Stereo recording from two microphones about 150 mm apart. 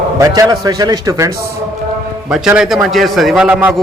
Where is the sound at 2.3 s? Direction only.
5° right (ahead or behind).